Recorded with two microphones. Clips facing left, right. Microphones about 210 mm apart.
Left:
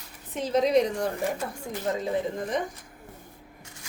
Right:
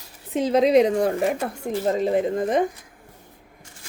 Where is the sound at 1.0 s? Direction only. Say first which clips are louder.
Right 7 dB; 75° right (ahead or behind).